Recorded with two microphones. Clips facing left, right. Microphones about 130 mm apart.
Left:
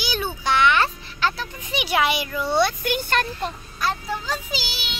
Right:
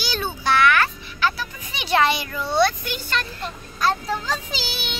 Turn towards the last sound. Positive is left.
turn(degrees=5)  # may be behind; listen again after turning